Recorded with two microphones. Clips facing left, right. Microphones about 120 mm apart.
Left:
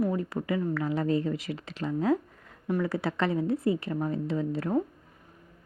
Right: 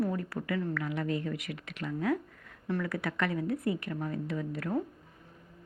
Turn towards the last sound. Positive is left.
turn(degrees=25)  # may be behind; listen again after turning